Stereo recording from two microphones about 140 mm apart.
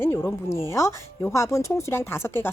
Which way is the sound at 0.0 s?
15° left (ahead or behind).